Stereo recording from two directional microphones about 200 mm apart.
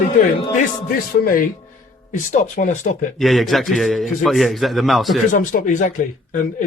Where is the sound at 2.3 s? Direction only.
40° left (ahead or behind).